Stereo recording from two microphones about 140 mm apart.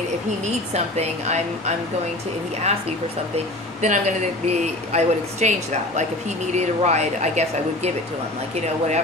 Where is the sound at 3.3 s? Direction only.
55° right (ahead or behind).